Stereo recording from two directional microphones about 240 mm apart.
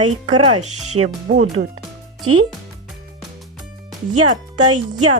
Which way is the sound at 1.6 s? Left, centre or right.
Right.